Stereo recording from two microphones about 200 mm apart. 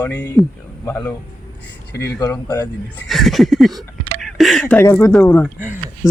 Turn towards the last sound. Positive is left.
turn(degrees=-10)  # may be behind; listen again after turning